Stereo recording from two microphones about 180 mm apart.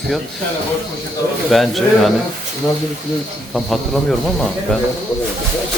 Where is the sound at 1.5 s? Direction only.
Centre (ahead or behind).